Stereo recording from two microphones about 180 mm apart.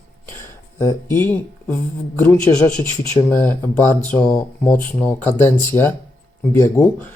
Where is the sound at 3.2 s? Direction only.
15° left (ahead or behind).